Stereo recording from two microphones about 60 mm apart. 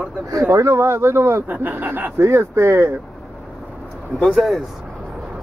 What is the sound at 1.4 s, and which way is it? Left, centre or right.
Speech, right.